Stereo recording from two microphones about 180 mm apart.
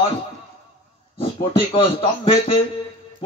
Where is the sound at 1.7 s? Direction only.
30° left (ahead or behind).